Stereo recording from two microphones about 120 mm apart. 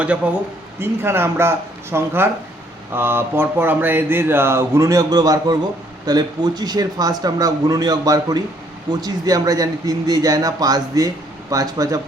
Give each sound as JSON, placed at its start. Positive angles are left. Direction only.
{"t": 0.2, "sound": "a man's voice", "side_deg": -10}